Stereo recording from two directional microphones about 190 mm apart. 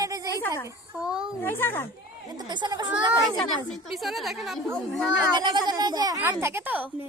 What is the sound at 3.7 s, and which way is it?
A child's voice, centre (ahead or behind).